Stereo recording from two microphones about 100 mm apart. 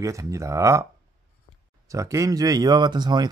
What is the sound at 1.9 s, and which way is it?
Speech, 30° right (ahead or behind).